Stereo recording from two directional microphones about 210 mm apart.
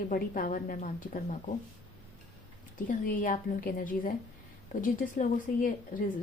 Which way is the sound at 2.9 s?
40° left (ahead or behind).